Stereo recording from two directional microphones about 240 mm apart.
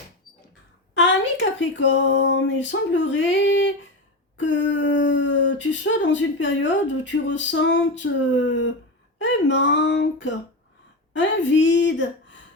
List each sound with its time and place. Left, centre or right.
0.9 s a woman's voice: left